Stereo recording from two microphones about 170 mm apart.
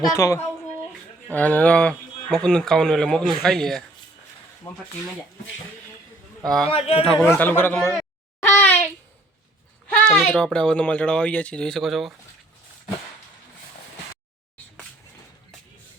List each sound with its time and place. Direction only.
0.0 s speech: 20° left (ahead or behind); by 3.8 s centre (ahead or behind)
4.7 s speech: 15° left (ahead or behind)
6.7 s speech: 35° left (ahead or behind)
7.1 s speech: 5° left (ahead or behind)
8.4 s a sound: 10° left (ahead or behind)
9.9 s speech: 5° left (ahead or behind)